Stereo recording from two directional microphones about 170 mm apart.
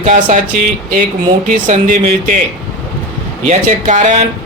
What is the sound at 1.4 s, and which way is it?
Speech, 50° right (ahead or behind).